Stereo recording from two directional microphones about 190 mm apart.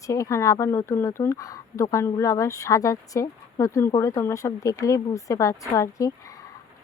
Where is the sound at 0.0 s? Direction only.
15° left (ahead or behind).